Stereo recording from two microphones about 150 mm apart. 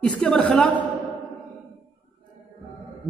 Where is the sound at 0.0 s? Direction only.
5° left (ahead or behind).